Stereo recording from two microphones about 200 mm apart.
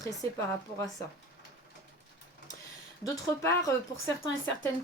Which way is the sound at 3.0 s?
15° left (ahead or behind).